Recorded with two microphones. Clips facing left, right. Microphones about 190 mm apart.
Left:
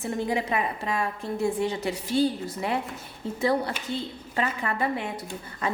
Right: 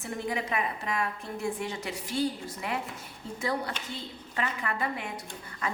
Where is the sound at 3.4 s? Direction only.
30° left (ahead or behind).